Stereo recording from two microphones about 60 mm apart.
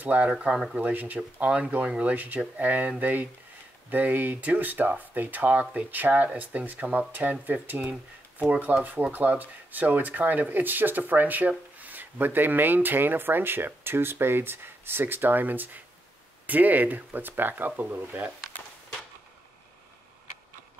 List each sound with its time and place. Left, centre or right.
0.0 s speech: right